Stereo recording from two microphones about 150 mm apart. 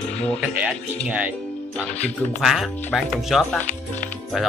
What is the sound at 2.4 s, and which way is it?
Speech, centre (ahead or behind).